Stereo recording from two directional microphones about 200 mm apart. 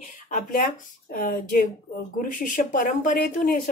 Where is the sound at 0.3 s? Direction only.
40° left (ahead or behind).